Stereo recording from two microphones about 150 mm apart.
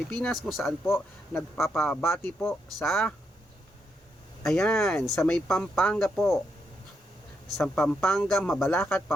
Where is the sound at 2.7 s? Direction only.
Centre (ahead or behind).